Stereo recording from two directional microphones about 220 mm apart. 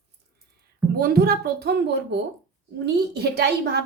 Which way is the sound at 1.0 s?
45° right (ahead or behind).